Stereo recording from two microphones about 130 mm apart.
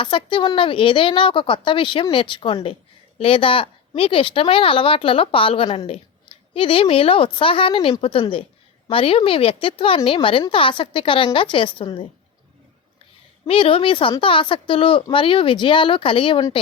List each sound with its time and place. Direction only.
0.0 s a woman's voice: 40° left (ahead or behind)
13.5 s a woman's voice: 45° left (ahead or behind)